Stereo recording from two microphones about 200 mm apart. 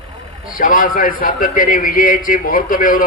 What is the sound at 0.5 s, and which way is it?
A man's voice, 45° left (ahead or behind).